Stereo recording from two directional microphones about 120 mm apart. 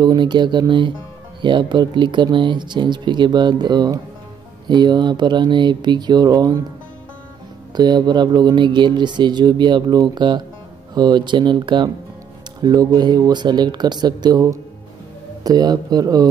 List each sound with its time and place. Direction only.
0.0 s speech: 35° right (ahead or behind)
7.7 s speech: 35° right (ahead or behind)
15.4 s speech: 35° right (ahead or behind)